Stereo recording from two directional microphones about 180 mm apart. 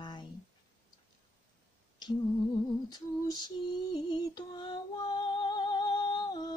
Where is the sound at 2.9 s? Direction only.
20° left (ahead or behind).